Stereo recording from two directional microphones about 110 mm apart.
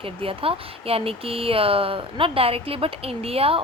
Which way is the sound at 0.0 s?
60° right (ahead or behind).